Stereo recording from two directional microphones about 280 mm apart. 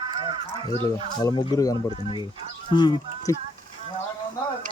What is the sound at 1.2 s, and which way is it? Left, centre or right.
Speech, centre.